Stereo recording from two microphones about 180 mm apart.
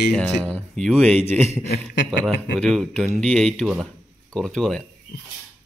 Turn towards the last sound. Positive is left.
turn(degrees=5)  # may be behind; listen again after turning